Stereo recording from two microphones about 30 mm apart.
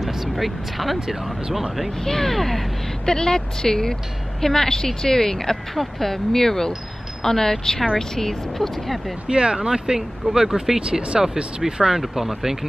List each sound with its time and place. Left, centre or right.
0.0 s speech: centre
2.0 s speech: centre
3.1 s speech: left; by 9.0 s centre
9.3 s speech: right; by 10.8 s centre
10.8 s speech: right
11.6 s speech: centre